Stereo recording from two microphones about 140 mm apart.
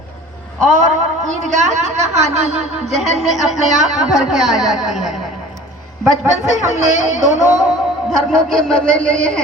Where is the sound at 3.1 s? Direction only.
Centre (ahead or behind).